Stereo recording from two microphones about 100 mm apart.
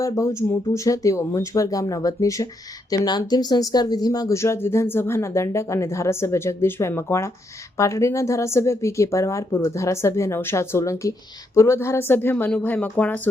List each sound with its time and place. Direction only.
0.0 s speech: 30° left (ahead or behind); by 13.2 s 15° left (ahead or behind)